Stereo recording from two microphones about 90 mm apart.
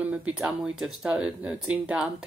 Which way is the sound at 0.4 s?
5° right (ahead or behind).